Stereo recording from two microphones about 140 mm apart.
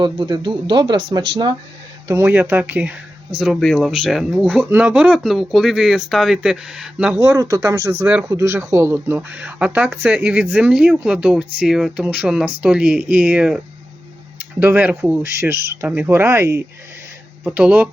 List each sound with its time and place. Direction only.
0.0 s speech: 35° right (ahead or behind)
2.0 s speech: 15° right (ahead or behind)
3.3 s speech: centre (ahead or behind)
7.2 s speech: 25° right (ahead or behind); by 13.6 s 10° right (ahead or behind)
14.6 s speech: 15° right (ahead or behind)